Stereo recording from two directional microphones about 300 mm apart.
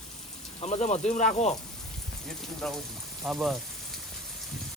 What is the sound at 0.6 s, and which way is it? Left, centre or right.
Speech, left.